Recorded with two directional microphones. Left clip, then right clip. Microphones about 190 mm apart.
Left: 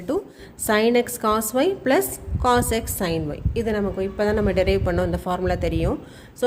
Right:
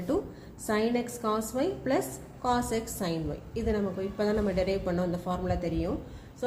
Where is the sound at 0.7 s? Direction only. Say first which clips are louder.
Left 10 dB; 50° left (ahead or behind).